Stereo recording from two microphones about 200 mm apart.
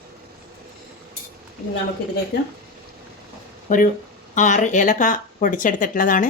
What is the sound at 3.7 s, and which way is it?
Speech, 40° left (ahead or behind).